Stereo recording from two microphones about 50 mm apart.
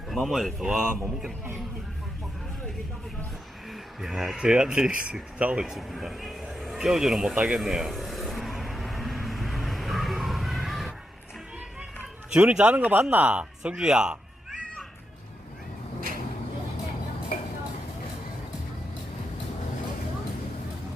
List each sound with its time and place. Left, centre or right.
0.1 s speech: centre
0.6 s a man's voice: centre
3.7 s speech: centre; by 5.6 s right
5.7 s a man's voice: centre
7.5 s vehicle: centre
12.3 s speech: right
13.6 s a man's voice: centre